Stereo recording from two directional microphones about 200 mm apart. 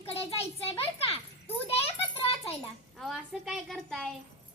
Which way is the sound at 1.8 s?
30° left (ahead or behind).